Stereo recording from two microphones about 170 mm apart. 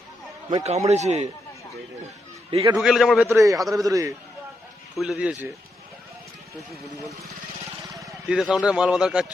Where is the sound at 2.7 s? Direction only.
Centre (ahead or behind).